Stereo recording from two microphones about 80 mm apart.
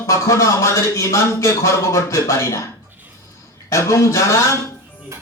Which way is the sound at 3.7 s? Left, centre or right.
Left.